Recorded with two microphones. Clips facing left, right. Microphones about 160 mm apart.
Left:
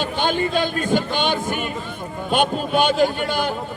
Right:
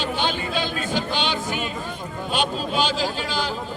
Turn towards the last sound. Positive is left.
turn(degrees=55)  # may be behind; listen again after turning